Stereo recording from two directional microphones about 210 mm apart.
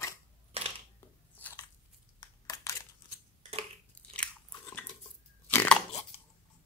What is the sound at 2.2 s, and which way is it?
Crushing, 15° left (ahead or behind).